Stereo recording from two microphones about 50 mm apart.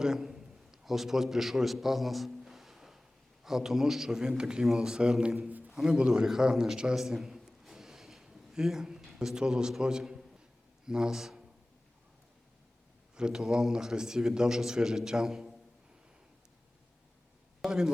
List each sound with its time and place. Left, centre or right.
0.0 s a sound: centre
3.4 s a man's voice: centre
5.4 s a man's voice: right
5.6 s a man's voice: centre
6.9 s a sound: centre
9.1 s a man's voice: centre
13.1 s a man's voice: centre
17.7 s speech: centre